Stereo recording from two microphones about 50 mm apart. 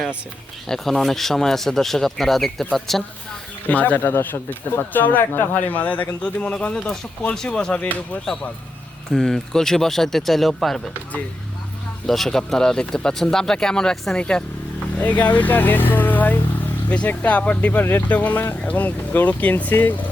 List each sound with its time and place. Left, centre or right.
0.7 s speech: centre
3.7 s speech: left
7.3 s speech: centre
9.1 s speech: centre
12.0 s speech: centre
13.9 s speech: centre
14.2 s speech: centre
14.9 s speech: left